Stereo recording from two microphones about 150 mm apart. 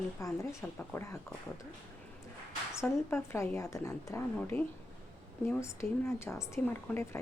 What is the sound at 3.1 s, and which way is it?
A woman's voice, 15° left (ahead or behind).